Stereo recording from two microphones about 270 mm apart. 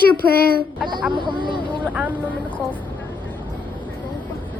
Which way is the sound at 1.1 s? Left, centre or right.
Centre.